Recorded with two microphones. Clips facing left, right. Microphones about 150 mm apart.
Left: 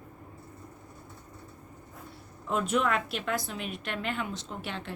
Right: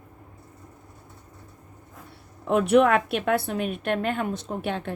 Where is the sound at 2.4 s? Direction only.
65° right (ahead or behind).